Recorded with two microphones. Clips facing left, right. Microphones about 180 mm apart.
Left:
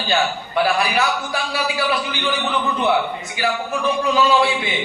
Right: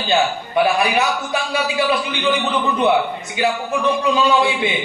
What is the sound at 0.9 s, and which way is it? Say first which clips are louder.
Speech: right 2 dB; 20° right (ahead or behind).